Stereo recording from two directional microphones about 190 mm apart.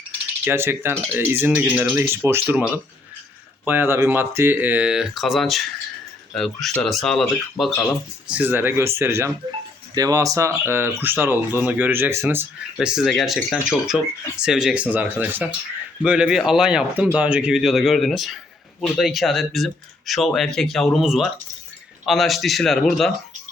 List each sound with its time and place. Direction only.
0.4 s speech: 10° right (ahead or behind)
3.7 s speech: 10° right (ahead or behind)
8.3 s speech: 10° right (ahead or behind)